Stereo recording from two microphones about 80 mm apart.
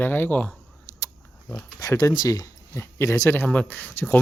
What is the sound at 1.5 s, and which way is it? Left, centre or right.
Speech, left.